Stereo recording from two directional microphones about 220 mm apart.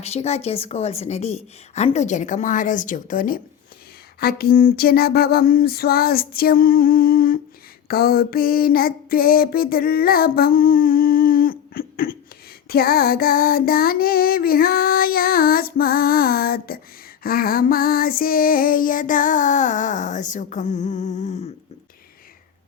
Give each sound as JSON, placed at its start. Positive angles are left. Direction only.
{"t": 0.0, "sound": "speech", "side_deg": 30}
{"t": 4.2, "sound": "a sound", "side_deg": 45}
{"t": 7.9, "sound": "music", "side_deg": 45}
{"t": 12.6, "sound": "female singing", "side_deg": 45}